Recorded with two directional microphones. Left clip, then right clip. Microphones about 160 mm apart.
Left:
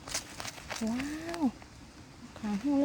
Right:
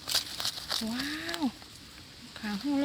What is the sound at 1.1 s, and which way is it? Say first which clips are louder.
Speech: right 3 dB; 25° left (ahead or behind).